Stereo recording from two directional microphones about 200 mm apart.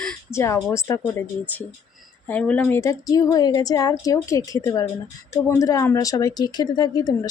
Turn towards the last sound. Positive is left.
turn(degrees=20)  # may be behind; listen again after turning